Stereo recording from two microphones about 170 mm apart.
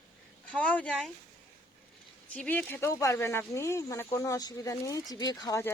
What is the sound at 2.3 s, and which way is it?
Speech, 10° left (ahead or behind).